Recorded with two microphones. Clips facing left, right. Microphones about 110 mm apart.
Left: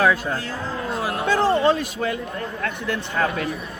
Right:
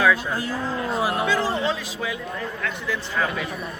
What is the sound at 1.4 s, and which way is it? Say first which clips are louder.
A man's voice: left 6 dB; 55° left (ahead or behind).